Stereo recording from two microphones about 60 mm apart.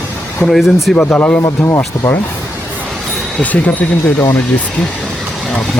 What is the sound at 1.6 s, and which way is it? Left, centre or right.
Speech, left.